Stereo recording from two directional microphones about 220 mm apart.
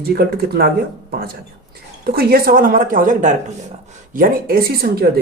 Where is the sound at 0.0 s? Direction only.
45° right (ahead or behind).